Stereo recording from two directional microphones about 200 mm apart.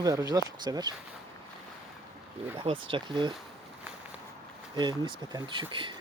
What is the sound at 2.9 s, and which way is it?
Speech, 25° right (ahead or behind).